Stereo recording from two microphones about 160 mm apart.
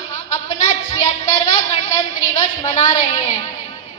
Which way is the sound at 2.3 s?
45° left (ahead or behind).